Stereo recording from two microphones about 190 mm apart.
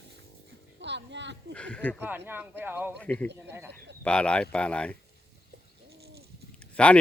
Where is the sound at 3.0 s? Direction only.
5° left (ahead or behind).